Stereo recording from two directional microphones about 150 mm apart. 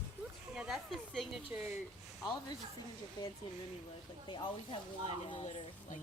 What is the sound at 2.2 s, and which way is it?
A woman's voice, 30° left (ahead or behind).